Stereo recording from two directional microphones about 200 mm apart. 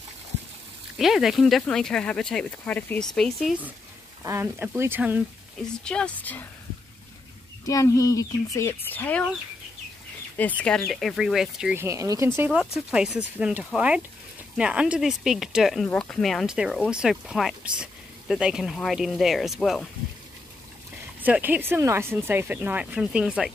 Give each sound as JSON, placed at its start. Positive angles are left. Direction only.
{"t": 0.9, "sound": "speech", "side_deg": 0}
{"t": 4.2, "sound": "speech", "side_deg": -15}
{"t": 5.6, "sound": "speech", "side_deg": 5}
{"t": 7.6, "sound": "speech", "side_deg": 15}
{"t": 10.6, "sound": "speech", "side_deg": 5}
{"t": 12.4, "sound": "speech", "side_deg": -5}
{"t": 21.2, "sound": "speech", "side_deg": -10}